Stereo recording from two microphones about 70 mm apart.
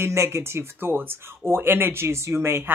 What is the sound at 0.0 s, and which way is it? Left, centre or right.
Speech, right.